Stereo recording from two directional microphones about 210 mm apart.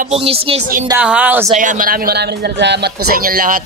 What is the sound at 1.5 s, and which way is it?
Speech, 40° right (ahead or behind).